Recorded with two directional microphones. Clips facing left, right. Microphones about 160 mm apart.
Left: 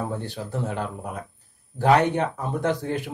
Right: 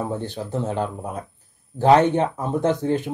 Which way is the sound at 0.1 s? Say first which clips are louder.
Right 3 dB; 20° right (ahead or behind).